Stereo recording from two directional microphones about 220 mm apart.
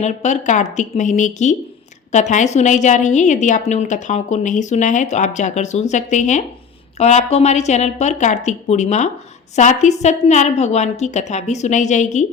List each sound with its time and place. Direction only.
0.0 s a woman's voice: 30° left (ahead or behind)